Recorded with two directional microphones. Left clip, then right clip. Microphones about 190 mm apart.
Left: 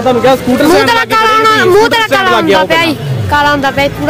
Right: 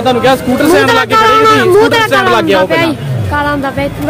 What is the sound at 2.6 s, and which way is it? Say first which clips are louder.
Speech: left 1 dB; 5° left (ahead or behind).